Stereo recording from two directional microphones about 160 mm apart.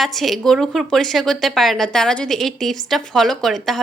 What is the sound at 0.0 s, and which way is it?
A woman's voice, centre (ahead or behind).